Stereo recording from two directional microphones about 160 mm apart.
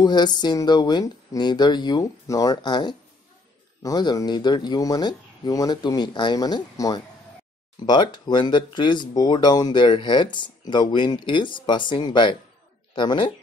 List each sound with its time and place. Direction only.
0.0 s speech: 25° left (ahead or behind)